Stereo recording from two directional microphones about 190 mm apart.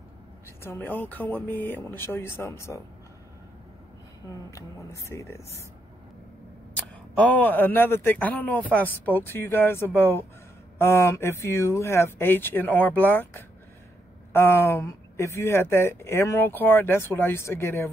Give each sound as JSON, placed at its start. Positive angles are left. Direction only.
{"t": 0.7, "sound": "speech", "side_deg": 10}
{"t": 4.5, "sound": "speech", "side_deg": 15}
{"t": 7.2, "sound": "speech", "side_deg": 10}